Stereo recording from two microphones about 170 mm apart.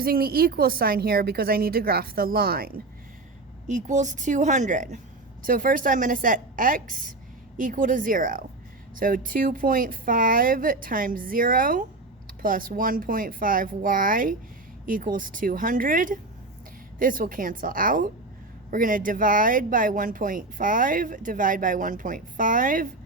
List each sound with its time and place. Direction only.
0.0 s speech: 60° right (ahead or behind)
3.7 s speech: 45° right (ahead or behind)